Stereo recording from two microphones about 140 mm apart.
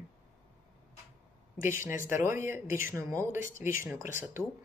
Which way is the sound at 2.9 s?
20° right (ahead or behind).